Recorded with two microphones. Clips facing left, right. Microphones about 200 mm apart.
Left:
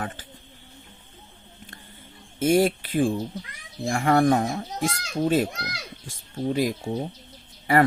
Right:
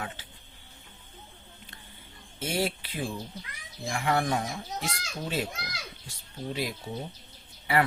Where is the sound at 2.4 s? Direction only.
50° left (ahead or behind).